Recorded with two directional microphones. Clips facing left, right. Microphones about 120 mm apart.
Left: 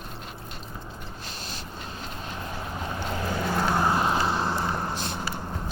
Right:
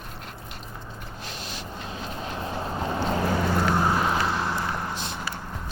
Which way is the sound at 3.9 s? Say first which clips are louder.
Even; 25° left (ahead or behind).